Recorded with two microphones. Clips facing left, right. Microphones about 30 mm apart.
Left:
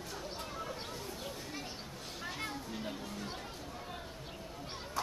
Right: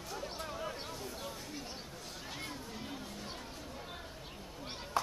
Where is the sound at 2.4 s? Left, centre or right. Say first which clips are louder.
Left 3 dB; centre.